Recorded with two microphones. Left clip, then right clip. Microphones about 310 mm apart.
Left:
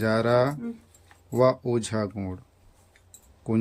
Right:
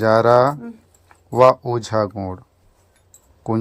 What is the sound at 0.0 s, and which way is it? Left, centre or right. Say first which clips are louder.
Speech: right 9 dB; right.